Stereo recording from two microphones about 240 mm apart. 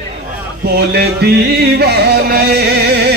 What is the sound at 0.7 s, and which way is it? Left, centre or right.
Music, right.